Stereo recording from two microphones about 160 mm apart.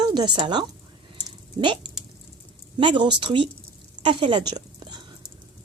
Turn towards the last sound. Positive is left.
turn(degrees=-25)  # may be behind; listen again after turning